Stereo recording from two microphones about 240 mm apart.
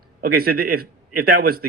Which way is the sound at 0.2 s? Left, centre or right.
Right.